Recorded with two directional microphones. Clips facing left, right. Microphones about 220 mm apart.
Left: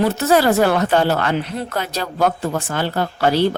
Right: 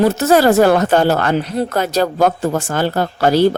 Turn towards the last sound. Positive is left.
turn(degrees=-45)  # may be behind; listen again after turning